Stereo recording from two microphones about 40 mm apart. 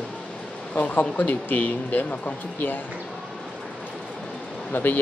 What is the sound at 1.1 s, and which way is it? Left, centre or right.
Speech, left.